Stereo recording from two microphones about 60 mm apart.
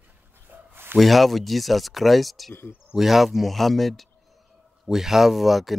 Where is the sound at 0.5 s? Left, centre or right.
Right.